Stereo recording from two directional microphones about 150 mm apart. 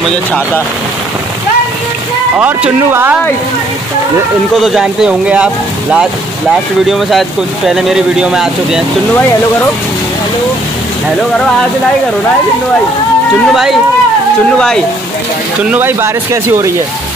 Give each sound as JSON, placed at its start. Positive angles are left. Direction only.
{"t": 2.3, "sound": "speech", "side_deg": -10}
{"t": 4.6, "sound": "speech", "side_deg": 0}
{"t": 13.5, "sound": "speech", "side_deg": 0}
{"t": 15.7, "sound": "speech", "side_deg": -15}